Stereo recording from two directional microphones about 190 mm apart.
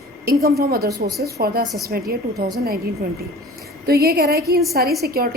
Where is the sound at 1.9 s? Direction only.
50° right (ahead or behind).